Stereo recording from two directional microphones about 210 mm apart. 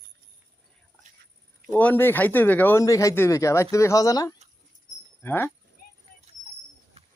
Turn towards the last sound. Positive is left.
turn(degrees=10)  # may be behind; listen again after turning